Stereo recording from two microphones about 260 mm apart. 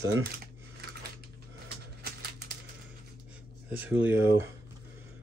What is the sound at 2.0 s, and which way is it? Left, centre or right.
Typewriter, right.